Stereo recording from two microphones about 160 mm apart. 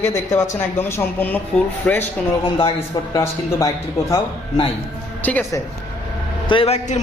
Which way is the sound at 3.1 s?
20° left (ahead or behind).